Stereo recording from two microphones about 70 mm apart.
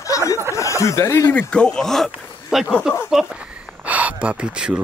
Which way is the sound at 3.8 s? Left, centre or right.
Right.